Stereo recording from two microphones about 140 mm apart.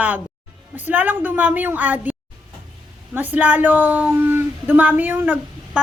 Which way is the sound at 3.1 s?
10° right (ahead or behind).